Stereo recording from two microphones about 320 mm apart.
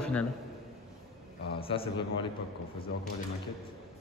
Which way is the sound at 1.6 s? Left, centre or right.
Centre.